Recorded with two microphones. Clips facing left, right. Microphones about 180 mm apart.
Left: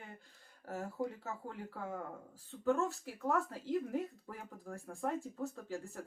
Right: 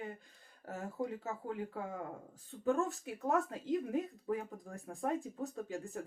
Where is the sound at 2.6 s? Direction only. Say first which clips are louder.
Even; 20° right (ahead or behind).